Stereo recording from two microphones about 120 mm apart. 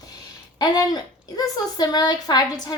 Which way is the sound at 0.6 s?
35° left (ahead or behind).